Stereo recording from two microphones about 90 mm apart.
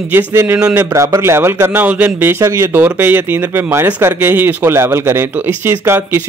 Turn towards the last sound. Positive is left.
turn(degrees=-25)  # may be behind; listen again after turning